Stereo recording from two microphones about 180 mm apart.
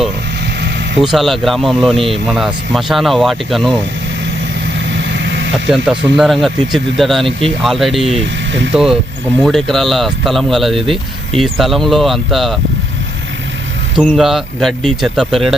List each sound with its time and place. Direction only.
0.9 s speech: centre (ahead or behind)
4.9 s vehicle: 80° right
5.6 s speech: 5° right (ahead or behind)
8.2 s speech: 90° right
8.7 s speech: centre (ahead or behind)
14.0 s speech: centre (ahead or behind)